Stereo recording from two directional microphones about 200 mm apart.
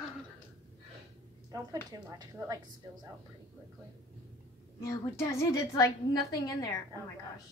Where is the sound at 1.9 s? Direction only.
20° right (ahead or behind).